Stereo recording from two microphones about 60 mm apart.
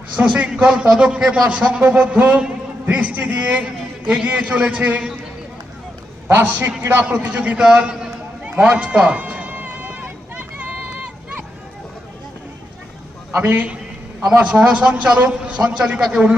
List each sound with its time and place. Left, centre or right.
0.2 s a man's voice: centre
6.6 s a man's voice: right
7.0 s a man's voice: centre
8.6 s run: centre
13.4 s a man's voice: right